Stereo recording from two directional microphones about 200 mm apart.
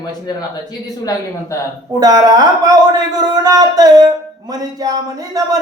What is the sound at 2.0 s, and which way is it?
Music, 20° right (ahead or behind).